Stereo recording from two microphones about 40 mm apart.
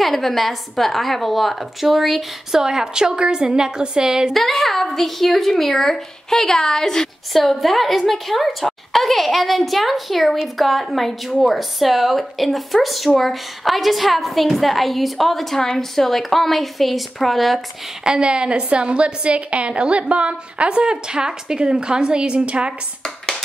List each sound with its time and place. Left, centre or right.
0.0 s speech: centre
2.6 s a woman's voice: centre
4.3 s speech: centre
7.3 s speech: centre
18.0 s a woman's voice: right